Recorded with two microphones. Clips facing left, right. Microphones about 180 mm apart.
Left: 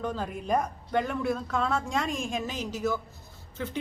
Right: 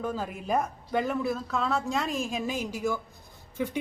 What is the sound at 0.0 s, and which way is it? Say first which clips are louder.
A woman's voice: even; 5° right (ahead or behind).